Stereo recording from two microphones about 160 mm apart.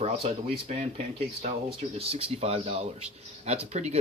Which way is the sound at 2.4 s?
40° right (ahead or behind).